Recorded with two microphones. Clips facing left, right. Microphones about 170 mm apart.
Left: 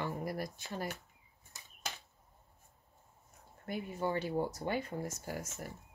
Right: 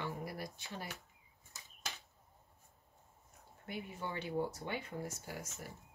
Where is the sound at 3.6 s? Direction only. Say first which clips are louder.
Left 7 dB; 45° left (ahead or behind).